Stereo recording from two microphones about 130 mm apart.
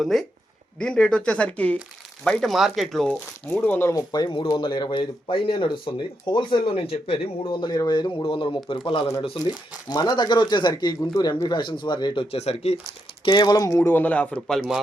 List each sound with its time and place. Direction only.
0.0 s speech: centre (ahead or behind)
3.6 s speech: 15° left (ahead or behind); by 7.2 s 45° left (ahead or behind)
7.6 s speech: 30° left (ahead or behind)
12.3 s speech: 55° left (ahead or behind)
13.2 s speech: 35° left (ahead or behind); by 14.8 s 5° left (ahead or behind)